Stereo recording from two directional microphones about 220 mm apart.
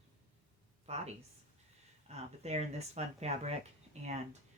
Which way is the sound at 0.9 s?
30° right (ahead or behind).